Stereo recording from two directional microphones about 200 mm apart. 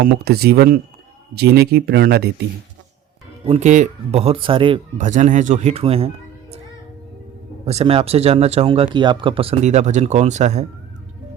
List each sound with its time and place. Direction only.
0.0 s speech: 50° right (ahead or behind)
3.4 s speech: 30° right (ahead or behind)
4.9 s speech: 40° right (ahead or behind)
7.6 s speech: 30° right (ahead or behind)